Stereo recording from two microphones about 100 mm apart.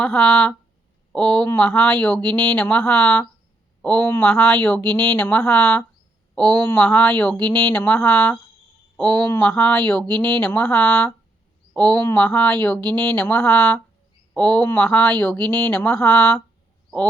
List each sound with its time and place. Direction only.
0.0 s speech: 10° left (ahead or behind)